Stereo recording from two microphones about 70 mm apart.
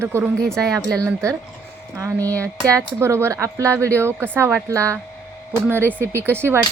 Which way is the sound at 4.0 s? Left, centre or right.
Right.